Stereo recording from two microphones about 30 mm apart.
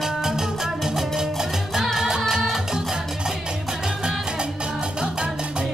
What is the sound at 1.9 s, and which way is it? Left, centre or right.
Music, centre.